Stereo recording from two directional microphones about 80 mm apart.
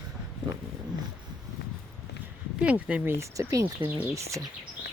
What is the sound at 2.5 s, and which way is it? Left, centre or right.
Speech, centre.